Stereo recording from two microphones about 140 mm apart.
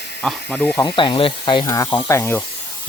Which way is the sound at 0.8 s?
35° left (ahead or behind).